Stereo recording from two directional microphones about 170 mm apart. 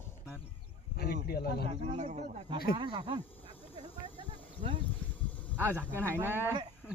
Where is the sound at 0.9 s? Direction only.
65° left (ahead or behind).